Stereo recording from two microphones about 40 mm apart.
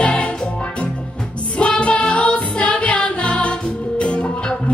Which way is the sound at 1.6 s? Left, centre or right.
Left.